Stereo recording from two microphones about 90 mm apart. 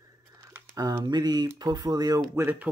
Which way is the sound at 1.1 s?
50° right (ahead or behind).